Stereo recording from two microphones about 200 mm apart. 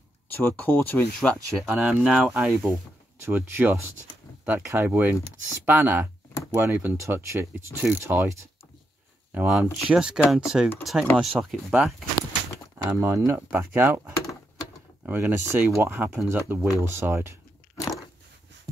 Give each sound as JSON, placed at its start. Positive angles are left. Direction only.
{"t": 0.4, "sound": "speech", "side_deg": 10}